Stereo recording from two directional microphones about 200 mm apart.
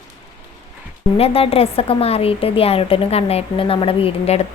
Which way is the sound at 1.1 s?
30° left (ahead or behind).